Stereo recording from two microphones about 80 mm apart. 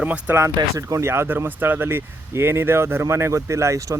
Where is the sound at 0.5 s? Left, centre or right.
Right.